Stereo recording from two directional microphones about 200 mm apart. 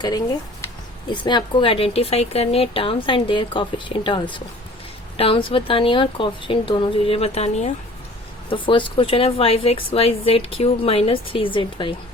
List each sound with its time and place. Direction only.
1.1 s a woman's voice: 25° left (ahead or behind)